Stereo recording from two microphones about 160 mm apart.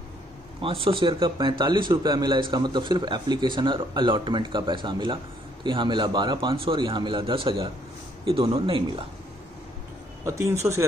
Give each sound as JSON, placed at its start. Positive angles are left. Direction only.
{"t": 0.6, "sound": "a man's voice", "side_deg": -35}
{"t": 10.2, "sound": "a man's voice", "side_deg": -20}